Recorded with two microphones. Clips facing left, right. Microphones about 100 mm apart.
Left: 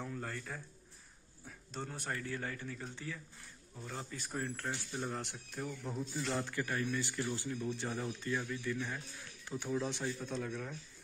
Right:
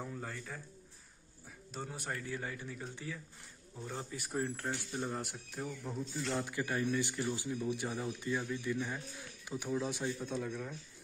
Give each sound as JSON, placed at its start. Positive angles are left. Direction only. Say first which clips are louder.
{"t": 0.0, "sound": "a man's voice", "louder": "left 1 dB", "side_deg": -5}
{"t": 1.7, "sound": "speech", "louder": "even", "side_deg": -10}
{"t": 4.9, "sound": "speech", "louder": "right 1 dB", "side_deg": -5}
{"t": 6.4, "sound": "speech", "louder": "right 2 dB", "side_deg": -15}